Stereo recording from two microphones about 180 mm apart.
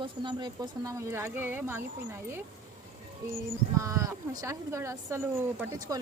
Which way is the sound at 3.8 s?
15° right (ahead or behind).